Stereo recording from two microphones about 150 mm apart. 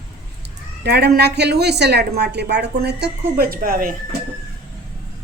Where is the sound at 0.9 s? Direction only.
90° right; by 3.9 s 70° right (ahead or behind).